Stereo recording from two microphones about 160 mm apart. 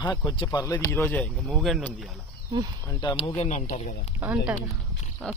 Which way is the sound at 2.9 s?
25° left (ahead or behind).